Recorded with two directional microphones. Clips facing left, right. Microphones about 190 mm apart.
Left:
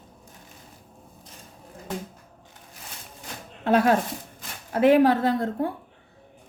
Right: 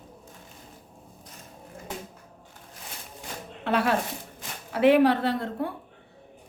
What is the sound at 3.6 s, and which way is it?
A woman's voice, 45° left (ahead or behind).